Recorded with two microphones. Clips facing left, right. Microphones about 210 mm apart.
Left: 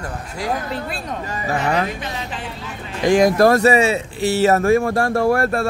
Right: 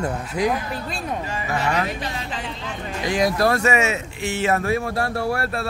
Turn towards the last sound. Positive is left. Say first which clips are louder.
# left 7 dB
turn(degrees=50)  # may be behind; listen again after turning